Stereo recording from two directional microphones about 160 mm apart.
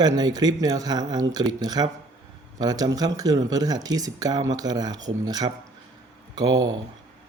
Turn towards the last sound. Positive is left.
turn(degrees=-25)  # may be behind; listen again after turning